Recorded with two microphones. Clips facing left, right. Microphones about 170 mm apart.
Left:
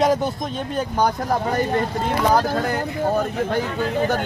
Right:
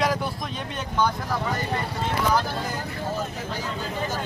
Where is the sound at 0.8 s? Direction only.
40° left (ahead or behind).